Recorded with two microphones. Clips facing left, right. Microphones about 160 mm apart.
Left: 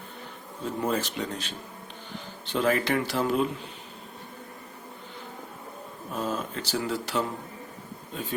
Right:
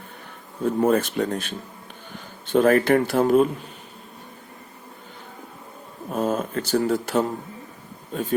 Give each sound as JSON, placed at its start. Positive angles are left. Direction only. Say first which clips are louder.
{"t": 0.6, "sound": "speech", "louder": "right 9 dB", "side_deg": -55}
{"t": 6.1, "sound": "speech", "louder": "right 7 dB", "side_deg": -50}